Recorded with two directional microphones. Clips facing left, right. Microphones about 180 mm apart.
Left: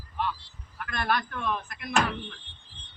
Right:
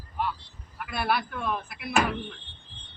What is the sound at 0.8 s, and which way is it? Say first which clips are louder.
A man's voice: right 1 dB; 10° right (ahead or behind).